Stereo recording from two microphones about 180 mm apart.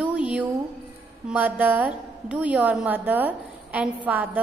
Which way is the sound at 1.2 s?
10° right (ahead or behind).